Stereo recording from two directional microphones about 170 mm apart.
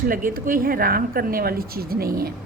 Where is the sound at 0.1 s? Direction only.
55° right (ahead or behind).